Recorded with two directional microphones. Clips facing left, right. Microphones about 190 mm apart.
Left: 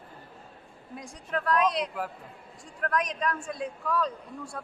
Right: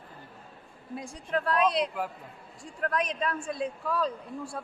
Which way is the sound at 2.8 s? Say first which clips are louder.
Even; 30° right (ahead or behind).